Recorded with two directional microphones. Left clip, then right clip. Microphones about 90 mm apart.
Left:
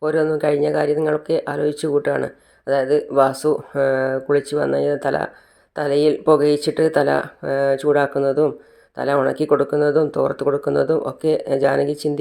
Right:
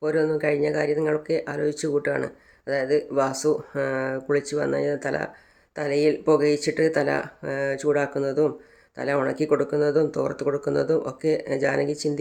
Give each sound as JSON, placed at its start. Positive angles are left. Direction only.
{"t": 0.0, "sound": "speech", "side_deg": 25}